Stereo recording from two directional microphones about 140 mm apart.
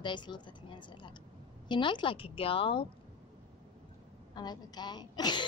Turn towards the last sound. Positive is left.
turn(degrees=30)  # may be behind; listen again after turning